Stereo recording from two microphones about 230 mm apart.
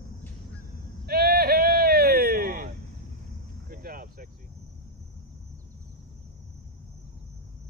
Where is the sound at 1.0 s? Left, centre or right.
Right.